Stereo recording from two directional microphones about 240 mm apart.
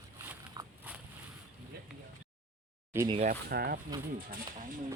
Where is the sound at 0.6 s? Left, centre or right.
Centre.